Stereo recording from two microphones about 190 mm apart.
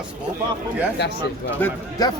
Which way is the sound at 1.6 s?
10° left (ahead or behind).